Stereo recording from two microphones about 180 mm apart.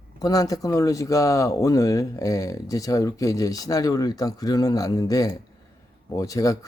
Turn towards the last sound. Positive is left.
turn(degrees=20)  # may be behind; listen again after turning